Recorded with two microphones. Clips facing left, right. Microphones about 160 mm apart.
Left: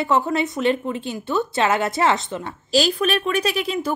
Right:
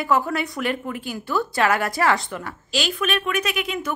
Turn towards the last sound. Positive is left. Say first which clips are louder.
# left 3 dB
turn(degrees=35)  # may be behind; listen again after turning